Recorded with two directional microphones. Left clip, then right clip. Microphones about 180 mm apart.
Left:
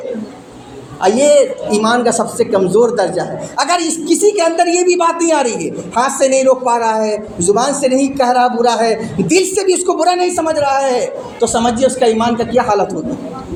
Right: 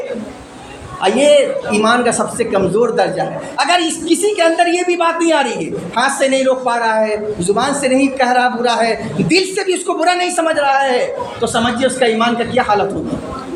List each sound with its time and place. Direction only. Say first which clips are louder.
1.0 s a man's voice: left 1 dB; 40° left (ahead or behind)
6.1 s speech: left 3 dB; 20° left (ahead or behind)
7.0 s a man's voice: even; 40° left (ahead or behind)